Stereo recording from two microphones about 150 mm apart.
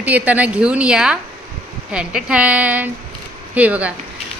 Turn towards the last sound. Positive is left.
turn(degrees=-10)  # may be behind; listen again after turning